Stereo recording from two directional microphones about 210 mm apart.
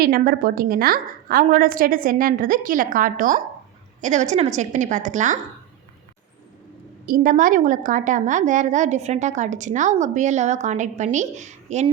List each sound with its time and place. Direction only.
0.0 s a woman's voice: 45° right (ahead or behind)
7.0 s a woman's voice: 40° right (ahead or behind)